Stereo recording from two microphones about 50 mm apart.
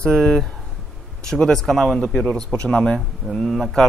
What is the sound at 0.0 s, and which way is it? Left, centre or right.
Speech, centre.